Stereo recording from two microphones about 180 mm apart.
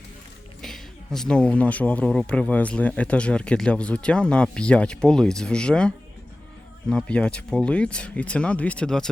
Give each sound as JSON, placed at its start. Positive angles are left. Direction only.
{"t": 0.6, "sound": "speech", "side_deg": 0}
{"t": 6.9, "sound": "speech", "side_deg": 5}